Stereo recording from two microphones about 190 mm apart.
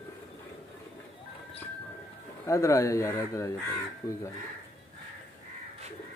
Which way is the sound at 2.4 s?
15° left (ahead or behind).